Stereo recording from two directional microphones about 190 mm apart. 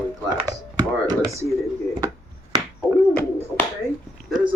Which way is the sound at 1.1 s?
15° right (ahead or behind).